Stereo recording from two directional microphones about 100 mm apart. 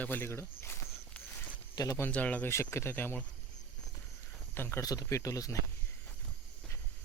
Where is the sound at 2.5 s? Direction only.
25° left (ahead or behind).